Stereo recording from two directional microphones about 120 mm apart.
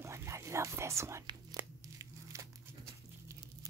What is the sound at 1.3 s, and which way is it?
Tearing, 30° right (ahead or behind).